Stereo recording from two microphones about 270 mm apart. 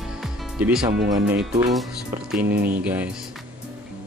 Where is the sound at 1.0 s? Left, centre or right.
Centre.